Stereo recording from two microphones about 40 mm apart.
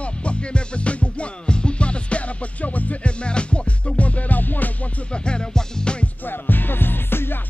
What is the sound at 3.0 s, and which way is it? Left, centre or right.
Music, left.